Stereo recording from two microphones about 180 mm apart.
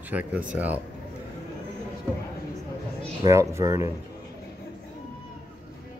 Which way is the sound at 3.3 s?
15° right (ahead or behind).